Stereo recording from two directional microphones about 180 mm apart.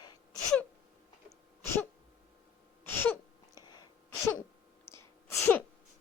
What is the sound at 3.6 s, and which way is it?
Sneeze, 25° left (ahead or behind).